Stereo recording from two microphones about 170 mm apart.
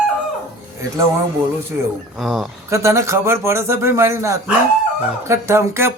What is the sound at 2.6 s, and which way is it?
Speech, 15° right (ahead or behind).